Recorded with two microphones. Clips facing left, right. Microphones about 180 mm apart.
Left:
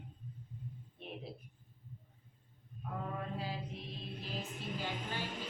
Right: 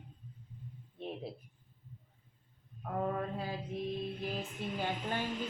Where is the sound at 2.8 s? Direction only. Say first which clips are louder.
Right 7 dB; 55° right (ahead or behind).